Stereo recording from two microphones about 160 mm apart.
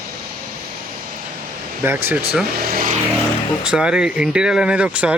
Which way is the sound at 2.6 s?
60° right (ahead or behind).